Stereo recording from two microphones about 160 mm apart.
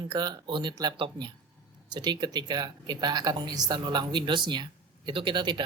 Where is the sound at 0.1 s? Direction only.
25° right (ahead or behind).